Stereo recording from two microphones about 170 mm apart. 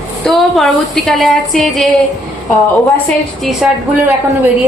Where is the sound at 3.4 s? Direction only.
Centre (ahead or behind).